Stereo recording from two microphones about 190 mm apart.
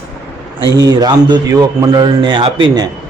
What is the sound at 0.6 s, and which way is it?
Speech, 20° right (ahead or behind).